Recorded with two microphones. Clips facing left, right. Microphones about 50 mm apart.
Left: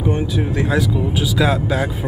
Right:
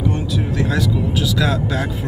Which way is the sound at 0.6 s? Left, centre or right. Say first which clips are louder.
Left 1 dB; centre.